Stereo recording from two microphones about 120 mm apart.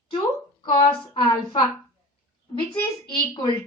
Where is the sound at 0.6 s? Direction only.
40° left (ahead or behind).